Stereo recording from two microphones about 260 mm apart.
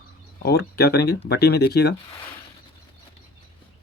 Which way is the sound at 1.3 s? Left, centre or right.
Left.